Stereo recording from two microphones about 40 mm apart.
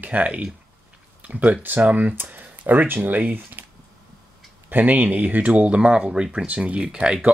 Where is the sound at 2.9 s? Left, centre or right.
Right.